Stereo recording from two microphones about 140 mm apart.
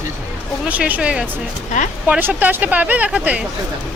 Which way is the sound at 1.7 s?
65° left (ahead or behind).